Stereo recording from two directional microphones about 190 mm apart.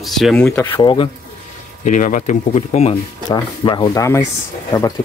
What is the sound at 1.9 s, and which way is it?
Speech, 45° left (ahead or behind).